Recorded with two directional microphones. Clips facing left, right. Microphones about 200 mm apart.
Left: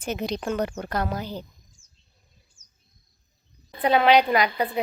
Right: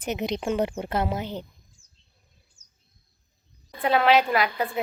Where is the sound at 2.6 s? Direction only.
35° right (ahead or behind).